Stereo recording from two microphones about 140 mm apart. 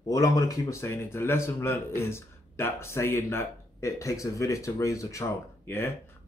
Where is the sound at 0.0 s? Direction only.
25° left (ahead or behind).